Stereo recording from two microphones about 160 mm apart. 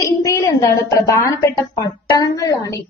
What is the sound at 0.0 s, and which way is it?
A woman's voice, 20° left (ahead or behind).